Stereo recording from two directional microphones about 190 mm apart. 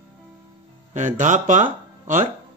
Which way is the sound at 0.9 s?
40° right (ahead or behind).